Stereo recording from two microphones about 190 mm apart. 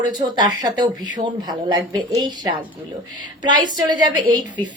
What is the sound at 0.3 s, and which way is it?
Speech, 20° right (ahead or behind).